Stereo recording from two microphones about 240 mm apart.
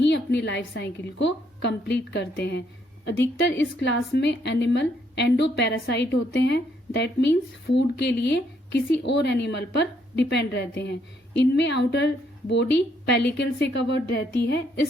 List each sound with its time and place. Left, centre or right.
0.0 s a woman's voice: left